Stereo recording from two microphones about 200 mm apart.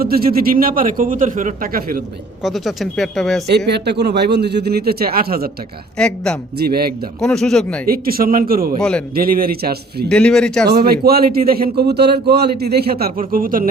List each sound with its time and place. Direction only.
0.0 s speech: 50° right (ahead or behind)
2.4 s speech: centre (ahead or behind)
3.7 s speech: 55° right (ahead or behind)
6.0 s speech: 5° left (ahead or behind)
6.6 s speech: 50° right (ahead or behind)
7.2 s speech: centre (ahead or behind)
7.9 s speech: 45° right (ahead or behind)
8.8 s speech: 5° left (ahead or behind)
9.1 s speech: 45° right (ahead or behind)
10.1 s speech: 5° left (ahead or behind)
10.7 s speech: 50° right (ahead or behind)